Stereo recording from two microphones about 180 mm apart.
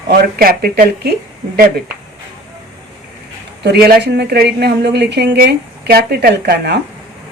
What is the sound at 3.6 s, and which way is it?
A woman's voice, 60° right (ahead or behind).